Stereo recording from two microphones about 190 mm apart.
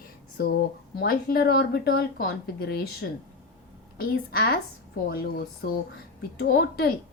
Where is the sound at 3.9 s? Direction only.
50° left (ahead or behind).